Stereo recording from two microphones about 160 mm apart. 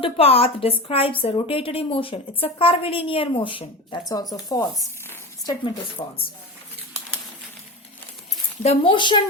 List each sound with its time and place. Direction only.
0.0 s a woman's voice: 35° left (ahead or behind)
8.6 s a woman's voice: 35° left (ahead or behind)